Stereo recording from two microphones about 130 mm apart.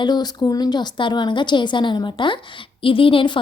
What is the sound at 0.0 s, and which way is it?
A woman's voice, 30° left (ahead or behind).